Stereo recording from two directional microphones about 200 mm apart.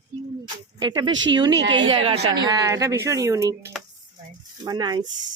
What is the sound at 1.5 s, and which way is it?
Speech, 65° right (ahead or behind).